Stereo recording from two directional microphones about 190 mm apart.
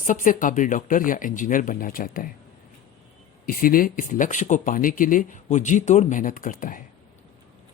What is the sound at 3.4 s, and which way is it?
Speech, 50° left (ahead or behind).